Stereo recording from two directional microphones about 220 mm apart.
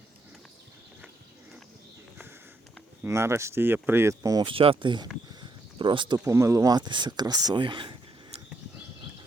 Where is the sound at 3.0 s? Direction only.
10° right (ahead or behind).